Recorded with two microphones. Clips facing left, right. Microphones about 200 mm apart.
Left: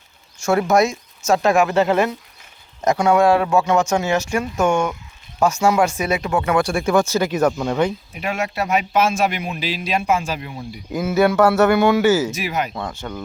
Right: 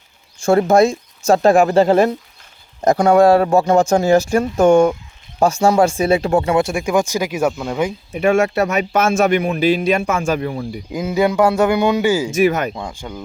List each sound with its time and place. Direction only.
0.3 s speech: 30° right (ahead or behind); by 7.9 s 5° right (ahead or behind)
8.4 s speech: 45° right (ahead or behind)
10.9 s a man's voice: 15° right (ahead or behind)
12.3 s speech: 50° right (ahead or behind)
12.7 s a man's voice: 10° right (ahead or behind)